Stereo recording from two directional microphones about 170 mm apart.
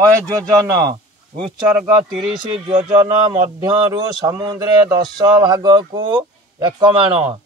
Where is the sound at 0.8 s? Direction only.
25° right (ahead or behind).